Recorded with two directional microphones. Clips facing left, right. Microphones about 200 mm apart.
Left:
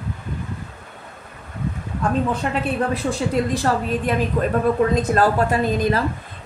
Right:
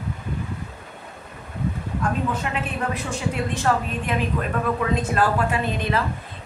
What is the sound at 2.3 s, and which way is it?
A woman's voice, 35° left (ahead or behind).